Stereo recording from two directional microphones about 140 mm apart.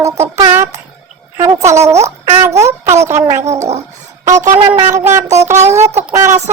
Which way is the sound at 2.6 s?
20° right (ahead or behind).